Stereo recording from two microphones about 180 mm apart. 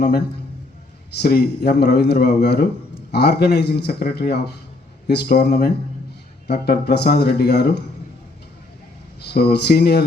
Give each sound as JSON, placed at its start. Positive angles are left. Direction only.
{"t": 1.2, "sound": "a man's voice", "side_deg": 60}
{"t": 9.3, "sound": "a man's voice", "side_deg": 65}